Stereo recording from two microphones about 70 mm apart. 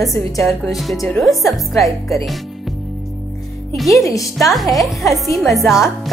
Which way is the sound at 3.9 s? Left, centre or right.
Left.